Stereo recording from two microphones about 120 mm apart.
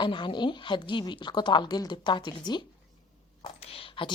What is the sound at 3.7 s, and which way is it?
Speech, 45° left (ahead or behind).